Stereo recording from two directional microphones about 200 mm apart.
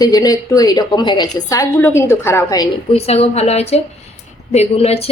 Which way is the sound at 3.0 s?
30° left (ahead or behind).